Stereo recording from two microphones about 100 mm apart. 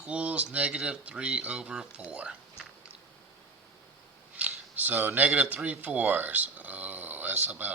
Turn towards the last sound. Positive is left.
turn(degrees=-20)  # may be behind; listen again after turning